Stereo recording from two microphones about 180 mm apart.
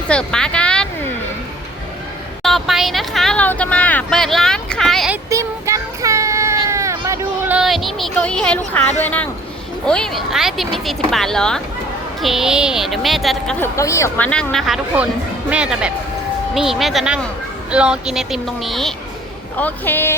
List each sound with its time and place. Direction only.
0.1 s a sound: 5° left (ahead or behind)
2.4 s speech: centre (ahead or behind)
5.1 s a sound: 15° right (ahead or behind); by 9.3 s 10° left (ahead or behind)
9.8 s speech: 5° left (ahead or behind)
13.6 s a woman's voice: 15° left (ahead or behind)
14.3 s a woman's voice: 5° left (ahead or behind)